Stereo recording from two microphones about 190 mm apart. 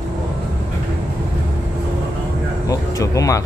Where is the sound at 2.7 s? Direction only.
15° left (ahead or behind).